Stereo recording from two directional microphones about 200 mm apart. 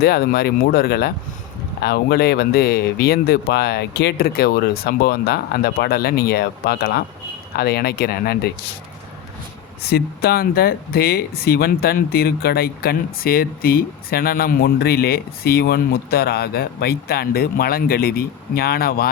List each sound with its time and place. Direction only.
0.0 s speech: 50° left (ahead or behind)
9.8 s speech: 50° left (ahead or behind)